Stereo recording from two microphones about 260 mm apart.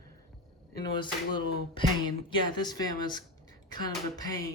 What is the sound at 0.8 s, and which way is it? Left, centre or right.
Speech, centre.